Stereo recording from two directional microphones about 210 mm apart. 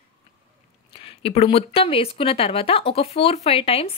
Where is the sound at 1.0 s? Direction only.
25° left (ahead or behind).